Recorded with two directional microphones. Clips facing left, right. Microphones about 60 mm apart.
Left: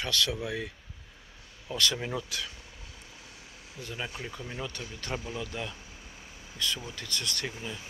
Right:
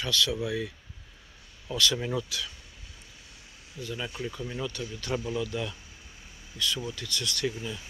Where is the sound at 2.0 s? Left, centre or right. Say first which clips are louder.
Right 3 dB; left.